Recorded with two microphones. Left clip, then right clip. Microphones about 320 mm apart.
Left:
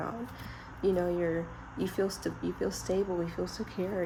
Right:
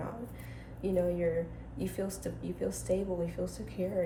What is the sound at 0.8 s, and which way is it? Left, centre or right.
Speech, left.